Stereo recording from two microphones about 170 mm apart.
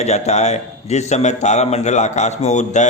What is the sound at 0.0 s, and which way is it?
A man's voice, 40° left (ahead or behind).